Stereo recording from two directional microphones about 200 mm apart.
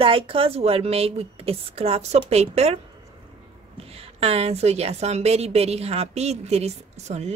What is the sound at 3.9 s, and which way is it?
A woman's voice, 30° right (ahead or behind).